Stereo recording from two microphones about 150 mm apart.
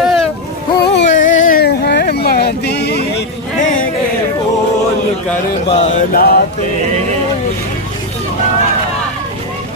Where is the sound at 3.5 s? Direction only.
60° left (ahead or behind).